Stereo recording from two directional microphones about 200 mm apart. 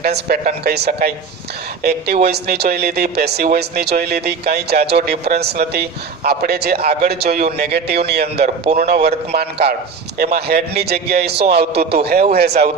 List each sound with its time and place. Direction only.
0.0 s a man's voice: 50° right (ahead or behind)